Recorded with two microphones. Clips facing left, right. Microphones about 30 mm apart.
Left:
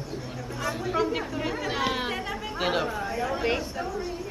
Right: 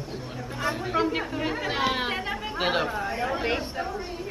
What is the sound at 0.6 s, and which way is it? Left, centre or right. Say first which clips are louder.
Speech: right 1 dB; right.